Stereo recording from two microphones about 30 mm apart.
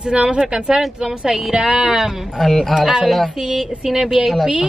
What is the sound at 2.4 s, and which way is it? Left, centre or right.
Speech, centre.